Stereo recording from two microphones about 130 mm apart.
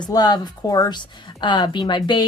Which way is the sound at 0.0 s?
30° left (ahead or behind).